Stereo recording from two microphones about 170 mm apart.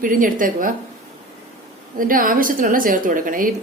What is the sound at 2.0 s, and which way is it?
Speech, 55° right (ahead or behind).